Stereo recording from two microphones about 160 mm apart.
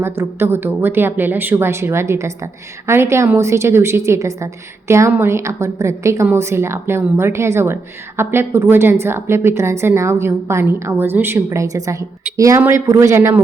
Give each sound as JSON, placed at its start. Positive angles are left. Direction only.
{"t": 0.0, "sound": "a woman's voice", "side_deg": -15}